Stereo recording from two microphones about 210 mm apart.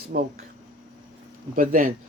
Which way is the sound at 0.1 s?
45° right (ahead or behind).